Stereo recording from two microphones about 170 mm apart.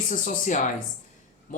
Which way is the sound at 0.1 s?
50° left (ahead or behind).